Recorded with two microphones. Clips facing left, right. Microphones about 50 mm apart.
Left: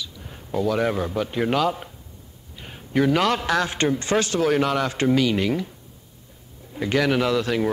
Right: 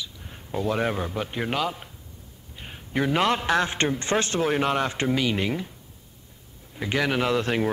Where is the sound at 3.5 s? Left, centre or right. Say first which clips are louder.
Left 1 dB; right.